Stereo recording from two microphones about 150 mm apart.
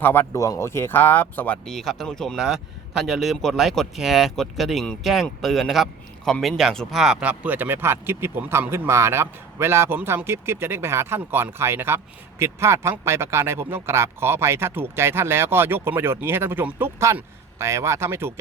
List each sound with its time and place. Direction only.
0.0 s speech: 15° left (ahead or behind); by 18.3 s 15° right (ahead or behind)